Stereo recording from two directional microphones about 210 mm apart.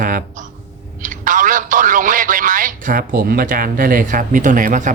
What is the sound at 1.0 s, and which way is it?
A man's voice, 40° right (ahead or behind).